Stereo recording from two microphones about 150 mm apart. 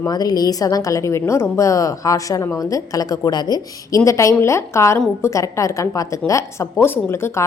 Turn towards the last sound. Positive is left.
turn(degrees=15)  # may be behind; listen again after turning